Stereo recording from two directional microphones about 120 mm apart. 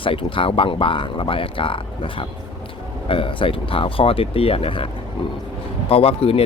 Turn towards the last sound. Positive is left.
turn(degrees=50)  # may be behind; listen again after turning